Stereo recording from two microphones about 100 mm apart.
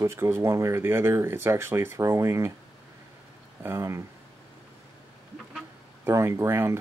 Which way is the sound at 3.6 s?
25° right (ahead or behind).